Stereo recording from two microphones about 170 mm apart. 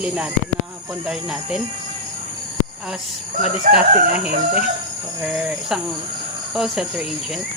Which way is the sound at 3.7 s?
55° right (ahead or behind).